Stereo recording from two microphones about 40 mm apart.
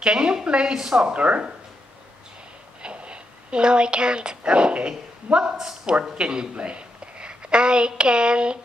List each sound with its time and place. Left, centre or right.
0.0 s speech: right
2.8 s a sound: right
4.5 s a woman's voice: right